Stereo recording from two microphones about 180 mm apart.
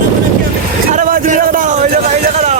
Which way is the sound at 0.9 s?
45° right (ahead or behind).